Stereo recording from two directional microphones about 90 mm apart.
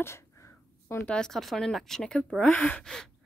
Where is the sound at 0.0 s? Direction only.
30° left (ahead or behind).